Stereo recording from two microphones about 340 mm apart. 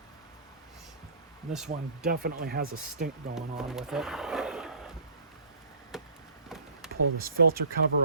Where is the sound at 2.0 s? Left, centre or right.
Right.